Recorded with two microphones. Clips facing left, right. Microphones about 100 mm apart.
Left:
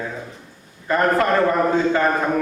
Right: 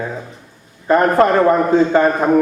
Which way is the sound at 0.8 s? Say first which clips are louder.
Right 6 dB; 25° right (ahead or behind).